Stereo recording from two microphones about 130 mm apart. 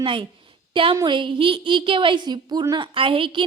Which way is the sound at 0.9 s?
35° right (ahead or behind).